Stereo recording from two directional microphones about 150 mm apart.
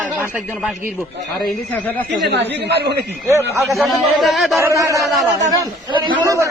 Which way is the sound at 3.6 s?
Centre (ahead or behind).